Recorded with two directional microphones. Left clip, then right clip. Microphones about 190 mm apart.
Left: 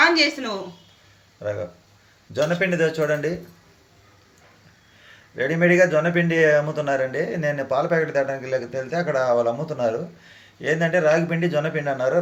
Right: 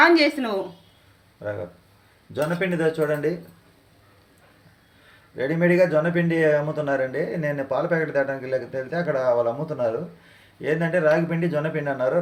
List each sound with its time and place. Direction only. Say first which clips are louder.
0.0 s speech: right 1 dB; 50° right (ahead or behind)
2.3 s speech: left 3 dB; 10° left (ahead or behind)
5.4 s a man's voice: left 2 dB; centre (ahead or behind)